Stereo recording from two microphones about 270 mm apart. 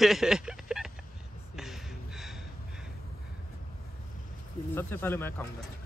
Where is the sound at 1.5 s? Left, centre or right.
Centre.